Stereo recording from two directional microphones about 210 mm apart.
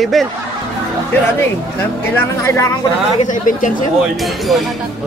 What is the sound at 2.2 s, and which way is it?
Speech, 15° left (ahead or behind).